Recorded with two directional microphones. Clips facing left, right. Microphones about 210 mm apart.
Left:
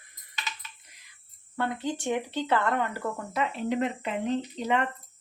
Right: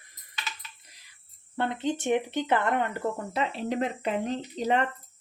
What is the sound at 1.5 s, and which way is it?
Speech, 25° right (ahead or behind).